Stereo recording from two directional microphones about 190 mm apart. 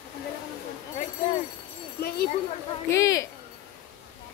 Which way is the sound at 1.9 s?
55° left (ahead or behind).